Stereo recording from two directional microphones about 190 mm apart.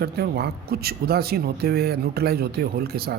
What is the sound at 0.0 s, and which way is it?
A woman's voice, 55° right (ahead or behind).